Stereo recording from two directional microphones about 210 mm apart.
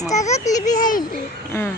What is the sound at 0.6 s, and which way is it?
Speech, 40° left (ahead or behind).